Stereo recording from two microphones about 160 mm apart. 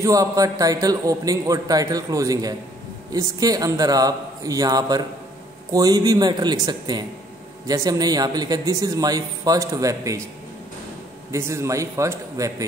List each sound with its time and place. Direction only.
0.0 s a man's voice: 20° right (ahead or behind)
11.3 s a man's voice: 15° right (ahead or behind)